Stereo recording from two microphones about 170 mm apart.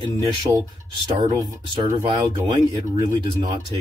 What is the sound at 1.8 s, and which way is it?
Speech, 25° right (ahead or behind).